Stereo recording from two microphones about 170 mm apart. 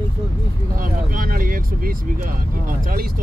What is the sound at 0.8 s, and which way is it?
Speech, 55° right (ahead or behind).